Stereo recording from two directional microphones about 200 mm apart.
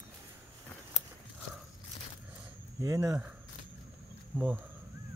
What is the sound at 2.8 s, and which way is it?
Speech, 15° right (ahead or behind).